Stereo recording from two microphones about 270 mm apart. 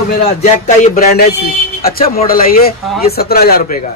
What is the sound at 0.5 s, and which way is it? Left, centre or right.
A man's voice, left.